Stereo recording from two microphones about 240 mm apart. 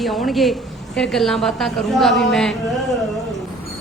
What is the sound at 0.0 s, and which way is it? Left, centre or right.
A woman's voice, centre.